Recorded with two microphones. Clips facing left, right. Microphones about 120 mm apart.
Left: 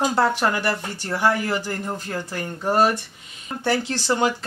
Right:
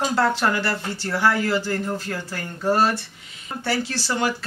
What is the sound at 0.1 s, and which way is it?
Speech, 15° left (ahead or behind).